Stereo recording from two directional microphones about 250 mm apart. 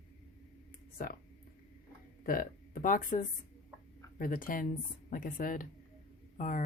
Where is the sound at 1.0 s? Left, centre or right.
Left.